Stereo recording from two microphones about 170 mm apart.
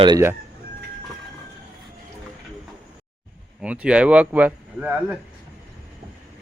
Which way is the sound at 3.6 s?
5° right (ahead or behind).